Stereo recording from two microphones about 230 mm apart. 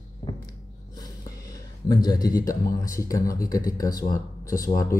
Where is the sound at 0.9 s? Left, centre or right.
Centre.